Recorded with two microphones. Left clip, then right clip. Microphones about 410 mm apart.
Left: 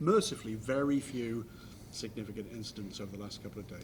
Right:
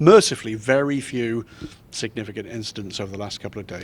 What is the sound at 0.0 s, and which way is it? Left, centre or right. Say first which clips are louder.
Speech: right 16 dB; right.